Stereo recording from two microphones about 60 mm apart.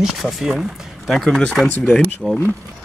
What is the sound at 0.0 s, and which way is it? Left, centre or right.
Speech, centre.